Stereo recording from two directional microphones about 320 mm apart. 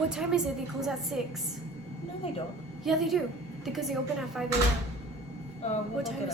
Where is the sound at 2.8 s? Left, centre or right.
Centre.